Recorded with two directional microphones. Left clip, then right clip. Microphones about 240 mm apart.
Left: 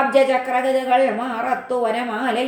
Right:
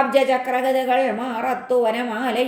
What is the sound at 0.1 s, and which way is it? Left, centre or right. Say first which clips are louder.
A woman's voice: left 2 dB; right.